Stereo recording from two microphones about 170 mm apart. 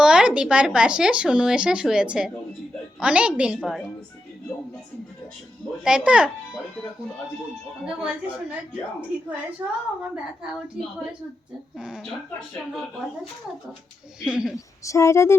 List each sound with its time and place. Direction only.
0.0 s a woman's voice: 5° right (ahead or behind)
5.8 s speech: 5° right (ahead or behind)
7.9 s a woman's voice: 10° right (ahead or behind)
11.8 s speech: 5° right (ahead or behind)
14.2 s speech: 5° right (ahead or behind)
14.8 s speech: 15° left (ahead or behind)